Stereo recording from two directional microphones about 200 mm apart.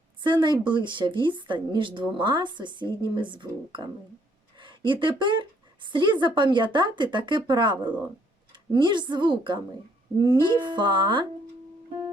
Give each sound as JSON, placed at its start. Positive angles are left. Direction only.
{"t": 0.2, "sound": "speech", "side_deg": -25}